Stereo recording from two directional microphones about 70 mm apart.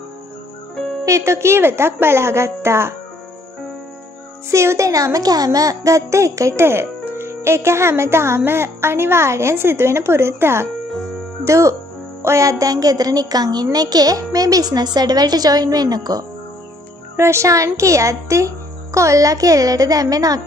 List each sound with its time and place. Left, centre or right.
1.0 s a child's voice: right
4.5 s speech: right
6.6 s a child's voice: right
17.2 s speech: right